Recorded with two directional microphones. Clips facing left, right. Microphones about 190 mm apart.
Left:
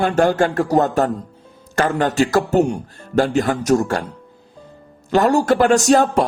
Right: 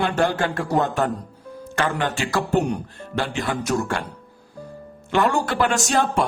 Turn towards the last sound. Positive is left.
turn(degrees=40)  # may be behind; listen again after turning